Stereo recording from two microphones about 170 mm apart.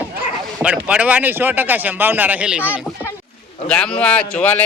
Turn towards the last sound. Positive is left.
turn(degrees=10)  # may be behind; listen again after turning